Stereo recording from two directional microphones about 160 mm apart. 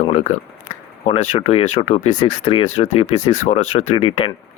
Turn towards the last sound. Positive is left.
turn(degrees=35)  # may be behind; listen again after turning